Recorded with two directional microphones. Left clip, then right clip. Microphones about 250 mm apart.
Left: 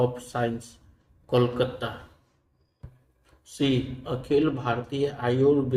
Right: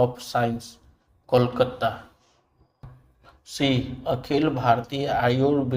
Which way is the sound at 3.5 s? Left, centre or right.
Right.